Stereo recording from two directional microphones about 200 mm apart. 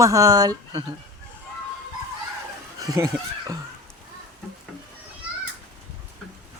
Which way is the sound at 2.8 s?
15° right (ahead or behind).